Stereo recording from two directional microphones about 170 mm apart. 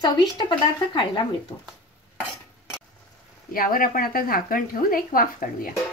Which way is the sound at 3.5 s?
55° left (ahead or behind).